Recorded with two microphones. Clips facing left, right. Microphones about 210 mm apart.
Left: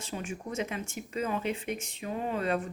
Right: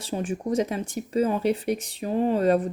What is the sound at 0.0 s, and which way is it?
Speech, 35° right (ahead or behind).